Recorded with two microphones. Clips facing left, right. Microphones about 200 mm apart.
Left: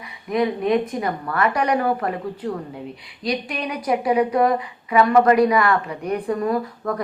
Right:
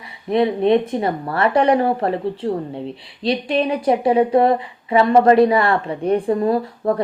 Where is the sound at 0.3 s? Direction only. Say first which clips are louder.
Right 4 dB; 30° right (ahead or behind).